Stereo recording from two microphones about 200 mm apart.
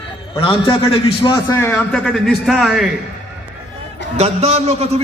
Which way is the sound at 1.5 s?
10° left (ahead or behind).